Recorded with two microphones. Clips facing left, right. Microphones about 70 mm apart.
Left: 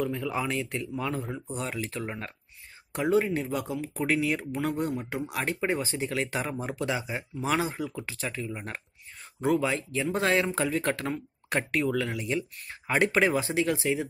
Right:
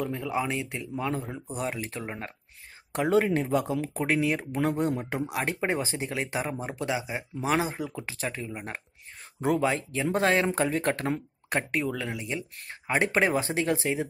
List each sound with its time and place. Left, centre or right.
0.0 s speech: right
8.5 s speech: centre
9.5 s speech: right
11.9 s speech: right
13.1 s speech: right